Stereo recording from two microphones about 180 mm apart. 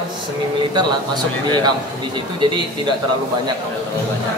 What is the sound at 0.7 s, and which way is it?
Speech, 25° right (ahead or behind).